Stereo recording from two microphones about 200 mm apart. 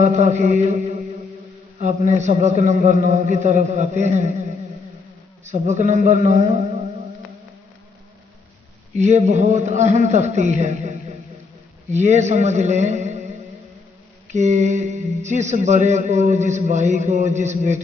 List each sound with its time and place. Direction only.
0.0 s a man's voice: 35° right (ahead or behind)
1.8 s a man's voice: 35° right (ahead or behind)
5.5 s a man's voice: 35° right (ahead or behind)
9.0 s a man's voice: 35° right (ahead or behind)
14.3 s a man's voice: 35° right (ahead or behind)